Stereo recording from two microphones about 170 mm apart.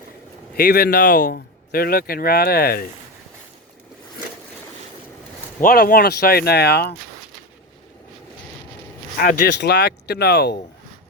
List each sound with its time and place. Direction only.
0.5 s speech: 65° left (ahead or behind)
5.5 s speech: 55° left (ahead or behind); by 6.9 s 70° left (ahead or behind)
9.2 s speech: 80° left